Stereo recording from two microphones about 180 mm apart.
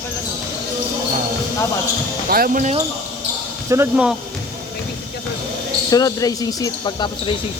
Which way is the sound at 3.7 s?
15° right (ahead or behind).